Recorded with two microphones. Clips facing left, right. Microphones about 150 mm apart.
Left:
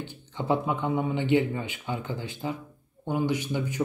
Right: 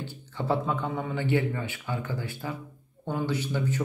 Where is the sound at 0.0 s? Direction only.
20° left (ahead or behind).